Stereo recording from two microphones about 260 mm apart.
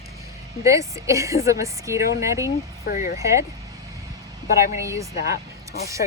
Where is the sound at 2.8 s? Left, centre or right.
Left.